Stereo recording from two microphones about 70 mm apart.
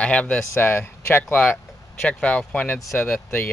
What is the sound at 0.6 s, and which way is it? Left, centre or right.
Speech, left.